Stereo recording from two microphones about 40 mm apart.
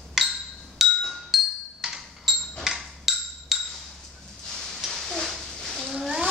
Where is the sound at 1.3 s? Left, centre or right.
Centre.